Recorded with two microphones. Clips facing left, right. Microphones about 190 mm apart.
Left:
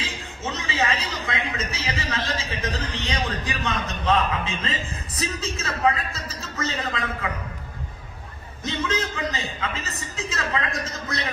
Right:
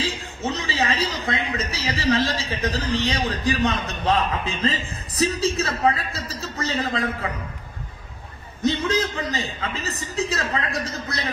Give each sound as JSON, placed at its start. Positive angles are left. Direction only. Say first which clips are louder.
{"t": 0.0, "sound": "a man's voice", "louder": "right 5 dB", "side_deg": -35}
{"t": 8.6, "sound": "a man's voice", "louder": "right 5 dB", "side_deg": -35}